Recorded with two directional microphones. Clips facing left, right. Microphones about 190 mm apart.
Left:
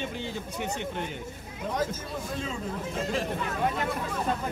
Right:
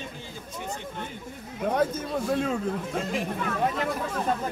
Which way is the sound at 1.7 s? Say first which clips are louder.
Right 5 dB; 60° right (ahead or behind).